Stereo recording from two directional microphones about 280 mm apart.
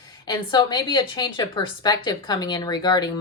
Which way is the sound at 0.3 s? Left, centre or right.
Centre.